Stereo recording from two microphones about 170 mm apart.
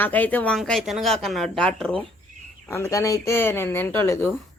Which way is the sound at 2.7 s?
20° left (ahead or behind).